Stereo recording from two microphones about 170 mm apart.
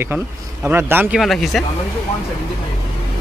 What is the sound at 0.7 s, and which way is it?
Speech, 10° right (ahead or behind).